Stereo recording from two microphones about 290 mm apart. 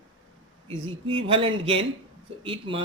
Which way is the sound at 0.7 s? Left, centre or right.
Centre.